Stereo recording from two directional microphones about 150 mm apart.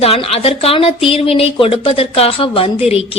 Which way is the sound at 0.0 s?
40° left (ahead or behind).